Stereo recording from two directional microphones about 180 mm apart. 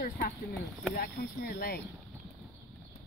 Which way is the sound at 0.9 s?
55° left (ahead or behind).